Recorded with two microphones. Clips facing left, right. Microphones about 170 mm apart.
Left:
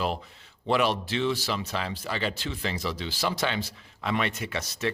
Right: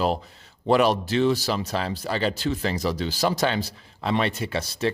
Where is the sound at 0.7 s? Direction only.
40° right (ahead or behind).